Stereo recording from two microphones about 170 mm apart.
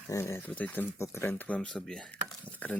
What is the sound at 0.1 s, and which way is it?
Speech, 15° left (ahead or behind).